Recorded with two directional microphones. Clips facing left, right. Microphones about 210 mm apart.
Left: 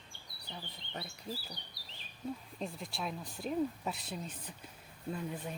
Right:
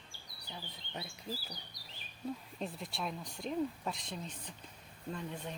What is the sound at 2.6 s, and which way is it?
Speech, centre (ahead or behind).